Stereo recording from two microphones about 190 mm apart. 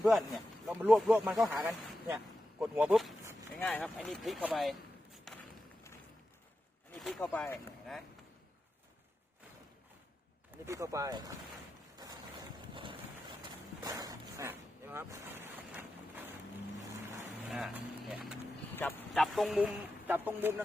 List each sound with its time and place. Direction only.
0.0 s speech: centre (ahead or behind)
3.6 s speech: 10° left (ahead or behind)
5.3 s run: centre (ahead or behind)
6.9 s speech: 5° left (ahead or behind)
10.7 s speech: 15° right (ahead or behind)
12.7 s boat: 25° right (ahead or behind); by 16.2 s 10° right (ahead or behind)
17.2 s vehicle: 5° right (ahead or behind)
18.8 s speech: 10° left (ahead or behind); by 20.5 s 10° right (ahead or behind)